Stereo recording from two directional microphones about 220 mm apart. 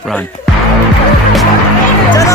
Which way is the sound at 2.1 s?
15° left (ahead or behind).